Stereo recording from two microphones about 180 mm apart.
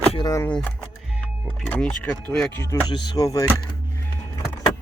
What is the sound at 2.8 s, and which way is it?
Speech, 25° left (ahead or behind).